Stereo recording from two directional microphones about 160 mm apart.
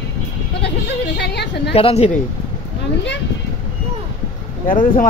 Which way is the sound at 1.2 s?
90° left.